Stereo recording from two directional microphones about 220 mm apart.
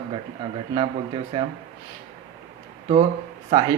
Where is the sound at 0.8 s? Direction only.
25° right (ahead or behind).